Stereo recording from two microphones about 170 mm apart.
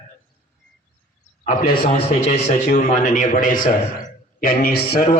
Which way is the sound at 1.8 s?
40° left (ahead or behind).